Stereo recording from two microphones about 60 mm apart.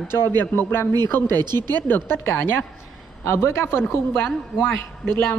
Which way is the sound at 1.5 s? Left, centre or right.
Left.